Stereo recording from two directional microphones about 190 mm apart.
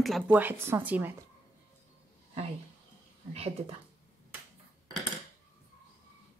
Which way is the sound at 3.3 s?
30° right (ahead or behind).